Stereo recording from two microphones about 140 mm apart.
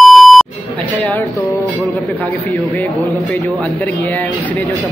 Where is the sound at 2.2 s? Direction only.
10° left (ahead or behind).